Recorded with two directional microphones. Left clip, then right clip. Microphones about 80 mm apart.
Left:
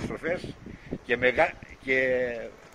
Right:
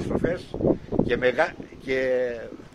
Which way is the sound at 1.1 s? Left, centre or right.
Right.